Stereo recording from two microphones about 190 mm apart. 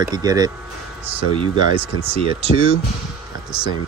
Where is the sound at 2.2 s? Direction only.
30° right (ahead or behind).